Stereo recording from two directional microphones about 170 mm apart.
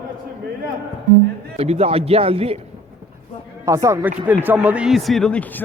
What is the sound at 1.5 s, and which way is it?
A man's voice, 40° right (ahead or behind).